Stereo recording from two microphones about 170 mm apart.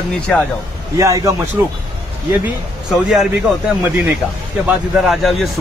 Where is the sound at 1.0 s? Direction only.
20° right (ahead or behind).